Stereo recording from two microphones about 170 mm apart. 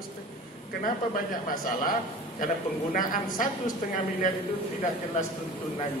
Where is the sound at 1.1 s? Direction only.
55° left (ahead or behind).